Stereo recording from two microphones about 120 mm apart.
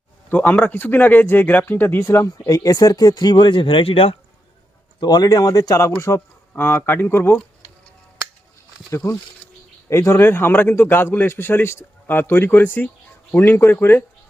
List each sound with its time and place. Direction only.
0.3 s a man's voice: 15° left (ahead or behind); by 4.2 s 50° left (ahead or behind)
4.9 s a man's voice: 35° left (ahead or behind); by 7.4 s 15° left (ahead or behind)
9.0 s a man's voice: 25° left (ahead or behind)